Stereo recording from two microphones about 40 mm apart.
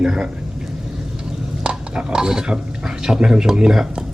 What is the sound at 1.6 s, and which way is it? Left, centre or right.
Speech, right.